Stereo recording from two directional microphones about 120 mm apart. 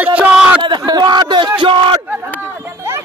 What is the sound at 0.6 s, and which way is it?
Speech, 40° right (ahead or behind).